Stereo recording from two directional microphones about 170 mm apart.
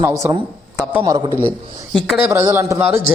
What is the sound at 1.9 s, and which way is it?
Speech, 5° right (ahead or behind).